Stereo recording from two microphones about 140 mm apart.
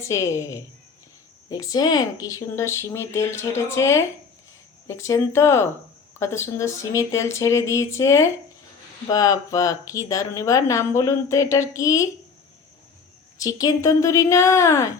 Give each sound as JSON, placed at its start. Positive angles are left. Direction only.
{"t": 0.0, "sound": "speech", "side_deg": 20}
{"t": 13.4, "sound": "speech", "side_deg": 25}